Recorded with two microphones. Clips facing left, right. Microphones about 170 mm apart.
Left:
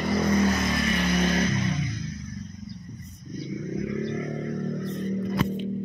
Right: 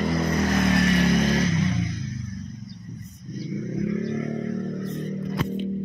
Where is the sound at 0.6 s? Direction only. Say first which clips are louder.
Right 5 dB; 65° right (ahead or behind).